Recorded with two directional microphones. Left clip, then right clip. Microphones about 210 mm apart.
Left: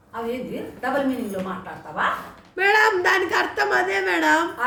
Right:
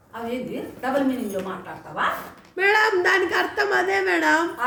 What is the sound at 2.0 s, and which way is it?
A woman's voice, centre (ahead or behind).